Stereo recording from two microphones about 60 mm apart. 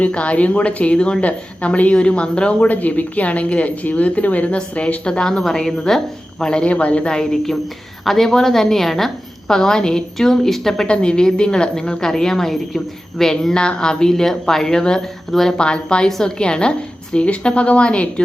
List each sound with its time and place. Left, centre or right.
0.0 s a woman's voice: left
2.6 s a woman's voice: left; by 10.8 s centre
10.8 s a woman's voice: centre